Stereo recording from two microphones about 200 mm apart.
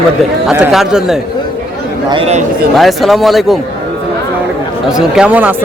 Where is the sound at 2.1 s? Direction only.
30° right (ahead or behind).